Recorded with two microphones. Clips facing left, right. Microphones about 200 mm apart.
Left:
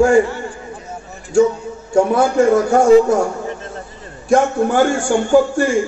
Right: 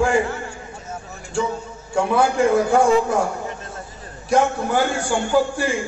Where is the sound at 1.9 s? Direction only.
45° left (ahead or behind).